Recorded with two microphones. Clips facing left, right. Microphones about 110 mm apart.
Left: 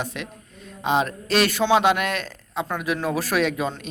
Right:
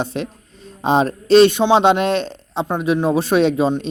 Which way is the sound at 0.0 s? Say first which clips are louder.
Right 7 dB; 30° right (ahead or behind).